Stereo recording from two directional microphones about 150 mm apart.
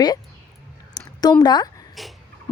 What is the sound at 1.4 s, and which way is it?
Speech, 30° left (ahead or behind).